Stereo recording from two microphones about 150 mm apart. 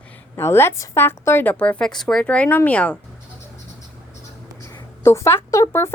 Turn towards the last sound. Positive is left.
turn(degrees=20)  # may be behind; listen again after turning